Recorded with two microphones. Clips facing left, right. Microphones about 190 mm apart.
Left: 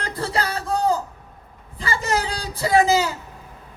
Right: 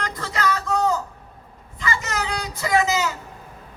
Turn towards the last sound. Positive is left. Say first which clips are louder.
# left 3 dB
turn(degrees=30)  # may be behind; listen again after turning